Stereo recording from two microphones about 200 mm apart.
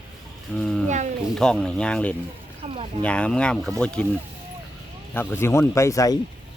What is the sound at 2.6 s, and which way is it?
Speech, 30° right (ahead or behind).